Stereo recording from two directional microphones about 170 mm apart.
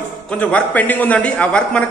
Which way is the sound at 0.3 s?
10° left (ahead or behind).